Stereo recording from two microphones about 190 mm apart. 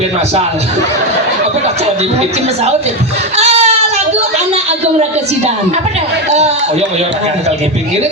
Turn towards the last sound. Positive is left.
turn(degrees=-35)  # may be behind; listen again after turning